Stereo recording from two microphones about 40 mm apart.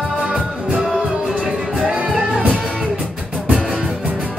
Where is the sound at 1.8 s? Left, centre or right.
Right.